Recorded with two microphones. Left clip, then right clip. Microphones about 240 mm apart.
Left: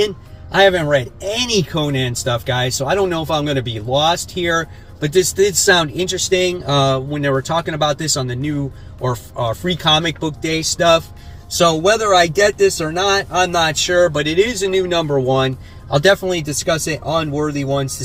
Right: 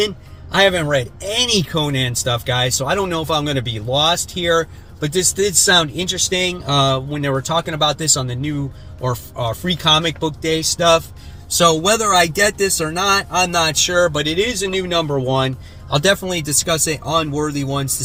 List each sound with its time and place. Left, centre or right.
0.8 s speech: centre